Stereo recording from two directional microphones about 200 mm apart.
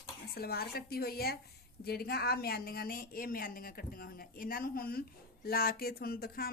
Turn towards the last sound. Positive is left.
turn(degrees=50)  # may be behind; listen again after turning